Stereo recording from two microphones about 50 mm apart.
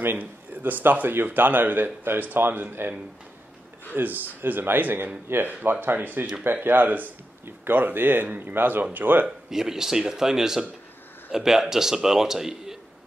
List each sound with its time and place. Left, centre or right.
0.0 s a man's voice: right
9.5 s a man's voice: centre